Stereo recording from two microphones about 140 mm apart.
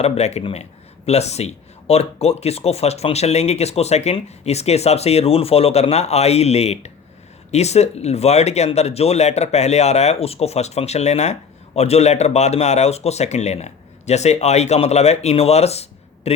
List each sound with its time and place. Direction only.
0.0 s speech: 50° left (ahead or behind)